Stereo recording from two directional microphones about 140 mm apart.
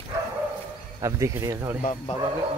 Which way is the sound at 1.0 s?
20° right (ahead or behind).